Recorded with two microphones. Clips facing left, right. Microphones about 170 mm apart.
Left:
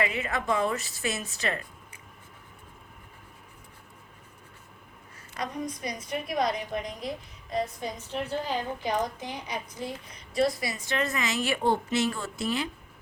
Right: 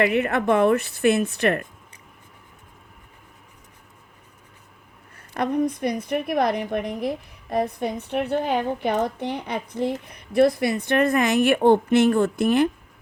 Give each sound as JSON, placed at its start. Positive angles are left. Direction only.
{"t": 0.0, "sound": "a woman's voice", "side_deg": -60}
{"t": 5.1, "sound": "a woman's voice", "side_deg": -60}